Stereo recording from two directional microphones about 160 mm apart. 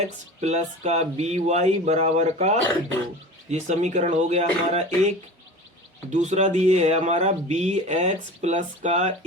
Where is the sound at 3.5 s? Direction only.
45° right (ahead or behind).